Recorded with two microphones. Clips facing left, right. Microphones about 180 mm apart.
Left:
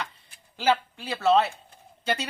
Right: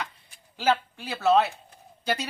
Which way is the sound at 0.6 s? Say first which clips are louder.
Left 1 dB; centre (ahead or behind).